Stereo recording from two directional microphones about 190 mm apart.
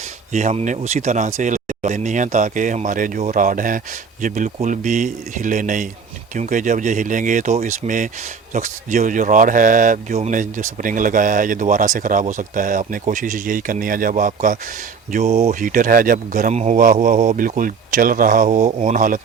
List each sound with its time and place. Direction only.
0.3 s speech: 40° right (ahead or behind)